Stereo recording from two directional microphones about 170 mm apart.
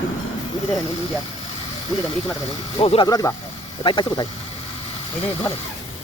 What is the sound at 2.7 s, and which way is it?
Speech, 30° left (ahead or behind).